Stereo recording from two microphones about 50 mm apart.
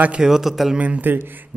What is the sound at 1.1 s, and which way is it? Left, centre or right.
Speech, right.